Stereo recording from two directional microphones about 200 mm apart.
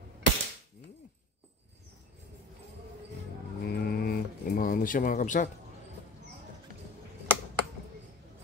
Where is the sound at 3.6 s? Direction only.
50° left (ahead or behind).